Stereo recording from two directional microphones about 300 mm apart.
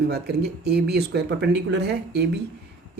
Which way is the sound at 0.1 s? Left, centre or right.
Right.